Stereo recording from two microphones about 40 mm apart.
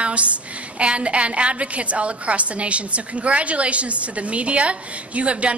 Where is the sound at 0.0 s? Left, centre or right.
Right.